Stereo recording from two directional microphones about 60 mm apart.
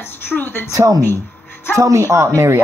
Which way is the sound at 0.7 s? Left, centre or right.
Right.